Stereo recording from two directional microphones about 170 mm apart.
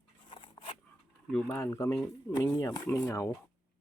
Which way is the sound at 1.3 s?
10° left (ahead or behind).